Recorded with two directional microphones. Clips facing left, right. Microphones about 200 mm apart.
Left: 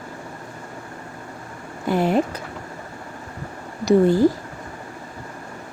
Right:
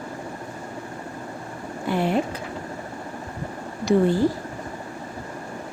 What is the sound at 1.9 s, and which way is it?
Speech, 40° left (ahead or behind).